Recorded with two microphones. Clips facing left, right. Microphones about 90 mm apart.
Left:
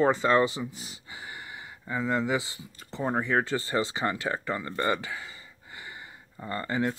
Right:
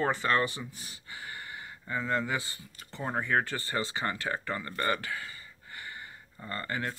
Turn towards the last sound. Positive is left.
turn(degrees=15)  # may be behind; listen again after turning